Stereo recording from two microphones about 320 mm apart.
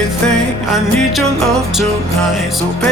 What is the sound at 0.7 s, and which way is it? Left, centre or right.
Music, centre.